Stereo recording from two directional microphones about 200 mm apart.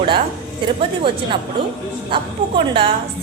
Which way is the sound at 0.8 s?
25° right (ahead or behind).